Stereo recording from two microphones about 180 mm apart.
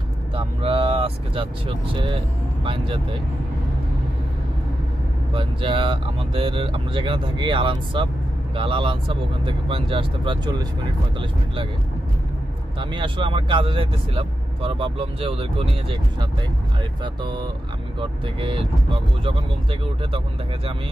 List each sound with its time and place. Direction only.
0.3 s vehicle: 30° right (ahead or behind)
2.6 s speech: 30° right (ahead or behind)
5.3 s speech: 30° right (ahead or behind)
12.7 s speech: 25° right (ahead or behind)